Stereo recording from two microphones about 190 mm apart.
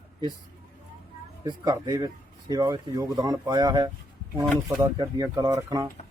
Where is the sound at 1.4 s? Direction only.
20° right (ahead or behind).